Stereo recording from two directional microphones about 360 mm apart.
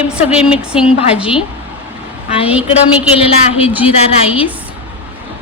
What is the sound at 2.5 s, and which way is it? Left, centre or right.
Speech, centre.